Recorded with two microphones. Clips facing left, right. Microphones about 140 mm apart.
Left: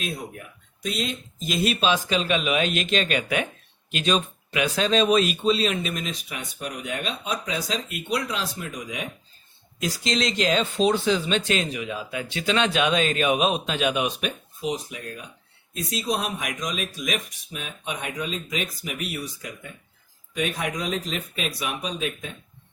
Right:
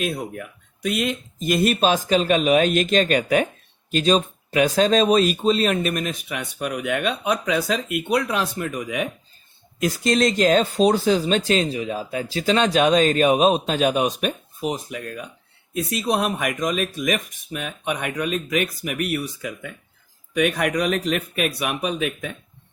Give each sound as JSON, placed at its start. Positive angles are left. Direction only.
{"t": 0.0, "sound": "speech", "side_deg": -60}